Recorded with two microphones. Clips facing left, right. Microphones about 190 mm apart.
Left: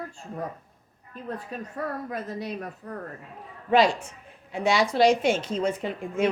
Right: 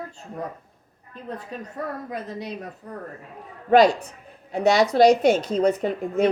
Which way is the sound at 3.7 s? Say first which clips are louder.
Right 5 dB; 40° right (ahead or behind).